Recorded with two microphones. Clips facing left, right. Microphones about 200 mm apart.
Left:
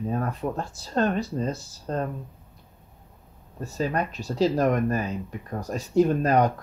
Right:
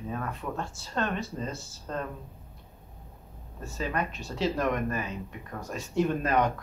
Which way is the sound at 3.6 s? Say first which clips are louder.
Left 5 dB; 35° left (ahead or behind).